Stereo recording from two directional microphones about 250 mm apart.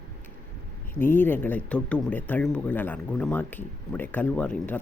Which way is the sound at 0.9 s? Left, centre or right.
Centre.